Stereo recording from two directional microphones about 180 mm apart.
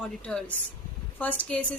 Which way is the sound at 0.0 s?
5° left (ahead or behind).